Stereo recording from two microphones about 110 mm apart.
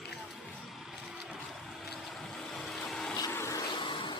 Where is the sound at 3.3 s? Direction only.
25° left (ahead or behind).